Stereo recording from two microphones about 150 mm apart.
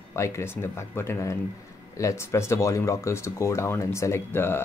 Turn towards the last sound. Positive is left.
turn(degrees=15)  # may be behind; listen again after turning